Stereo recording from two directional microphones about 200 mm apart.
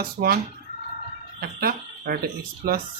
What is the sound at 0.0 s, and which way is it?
Speech, 50° right (ahead or behind).